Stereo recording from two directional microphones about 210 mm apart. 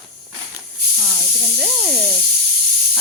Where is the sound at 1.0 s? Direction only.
Centre (ahead or behind).